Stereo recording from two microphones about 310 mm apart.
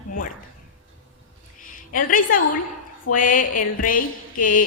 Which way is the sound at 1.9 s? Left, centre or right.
Left.